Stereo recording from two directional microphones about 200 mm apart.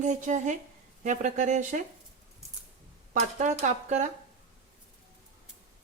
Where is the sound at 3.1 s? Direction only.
40° right (ahead or behind).